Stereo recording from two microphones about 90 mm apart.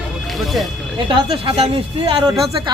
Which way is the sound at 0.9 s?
65° right (ahead or behind).